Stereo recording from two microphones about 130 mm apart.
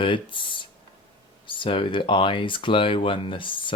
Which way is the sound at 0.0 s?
40° left (ahead or behind).